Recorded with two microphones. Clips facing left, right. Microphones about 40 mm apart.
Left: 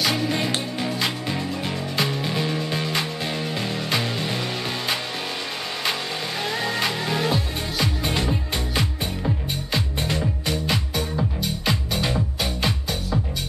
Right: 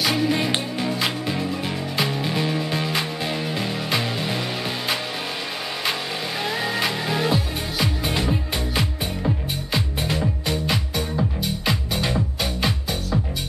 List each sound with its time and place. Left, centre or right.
0.0 s music: centre
6.4 s music: centre